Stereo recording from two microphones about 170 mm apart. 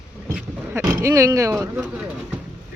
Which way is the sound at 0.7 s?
15° right (ahead or behind).